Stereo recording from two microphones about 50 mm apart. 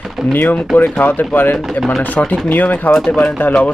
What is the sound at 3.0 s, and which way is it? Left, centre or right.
Speech, left.